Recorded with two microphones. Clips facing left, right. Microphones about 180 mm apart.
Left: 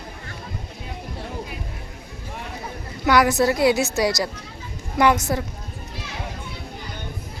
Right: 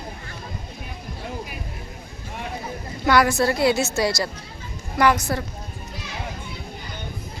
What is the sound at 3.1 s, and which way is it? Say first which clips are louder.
A woman's voice: left 1 dB; 15° left (ahead or behind).